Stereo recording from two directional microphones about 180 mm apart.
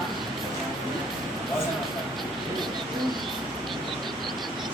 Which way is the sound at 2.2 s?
Centre (ahead or behind).